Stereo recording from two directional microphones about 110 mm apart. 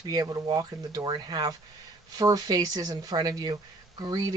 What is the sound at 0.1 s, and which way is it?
Speech, 35° right (ahead or behind).